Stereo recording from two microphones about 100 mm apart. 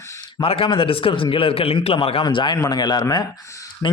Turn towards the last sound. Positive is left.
turn(degrees=45)  # may be behind; listen again after turning